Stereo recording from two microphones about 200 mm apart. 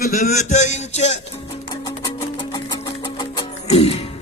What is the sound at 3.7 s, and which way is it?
Music, 30° left (ahead or behind).